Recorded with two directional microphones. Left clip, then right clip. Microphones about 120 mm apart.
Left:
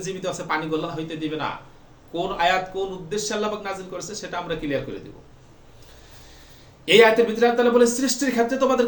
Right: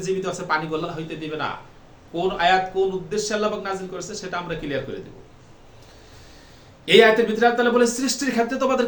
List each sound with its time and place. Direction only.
0.0 s a man's voice: 10° right (ahead or behind)
6.8 s a man's voice: 10° right (ahead or behind)